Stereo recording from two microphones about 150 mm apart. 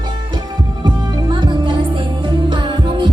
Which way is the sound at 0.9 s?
30° right (ahead or behind).